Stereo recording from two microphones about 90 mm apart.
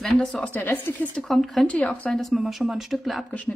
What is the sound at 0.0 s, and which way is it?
Speech, 10° left (ahead or behind).